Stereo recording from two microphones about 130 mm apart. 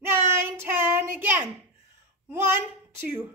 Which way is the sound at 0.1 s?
20° right (ahead or behind).